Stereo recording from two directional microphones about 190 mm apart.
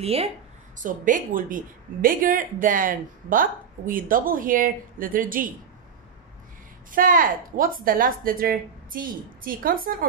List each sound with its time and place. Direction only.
0.0 s speech: 30° right (ahead or behind)
0.8 s speech: 45° right (ahead or behind)
6.9 s speech: 45° right (ahead or behind)